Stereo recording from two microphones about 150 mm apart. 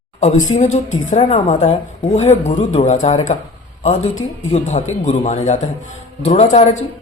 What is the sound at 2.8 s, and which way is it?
Speech, 55° left (ahead or behind).